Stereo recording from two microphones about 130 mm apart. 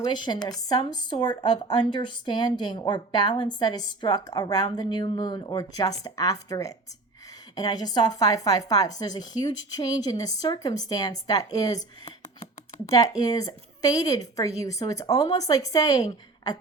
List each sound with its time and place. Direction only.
0.1 s a woman's voice: 35° left (ahead or behind)
13.0 s a woman's voice: 30° left (ahead or behind)